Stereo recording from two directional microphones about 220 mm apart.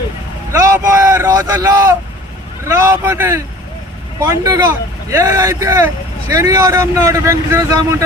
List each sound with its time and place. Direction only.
0.6 s speech: 15° right (ahead or behind)